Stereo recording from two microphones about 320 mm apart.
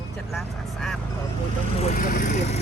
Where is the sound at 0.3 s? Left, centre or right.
Centre.